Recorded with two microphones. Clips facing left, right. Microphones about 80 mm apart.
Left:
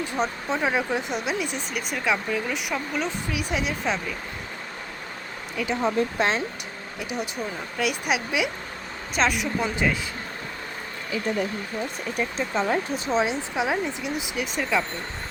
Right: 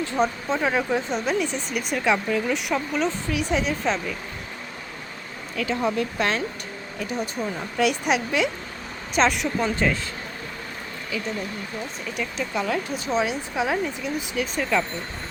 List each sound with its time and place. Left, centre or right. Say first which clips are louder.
0.4 s speech: right 1 dB; centre
5.5 s speech: even; centre
7.0 s speech: right 2 dB; centre
7.8 s a woman's voice: right 4 dB; centre
11.1 s speech: left 4 dB; left; by 14.8 s centre